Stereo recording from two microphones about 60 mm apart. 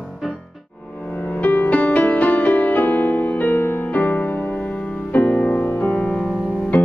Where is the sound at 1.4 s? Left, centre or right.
Left.